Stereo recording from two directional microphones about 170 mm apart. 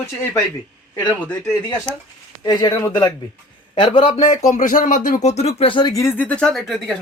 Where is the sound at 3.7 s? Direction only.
30° left (ahead or behind); by 5.1 s 50° left (ahead or behind).